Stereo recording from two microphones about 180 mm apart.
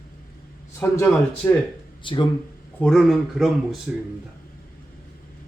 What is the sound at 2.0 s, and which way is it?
Speech, 25° left (ahead or behind).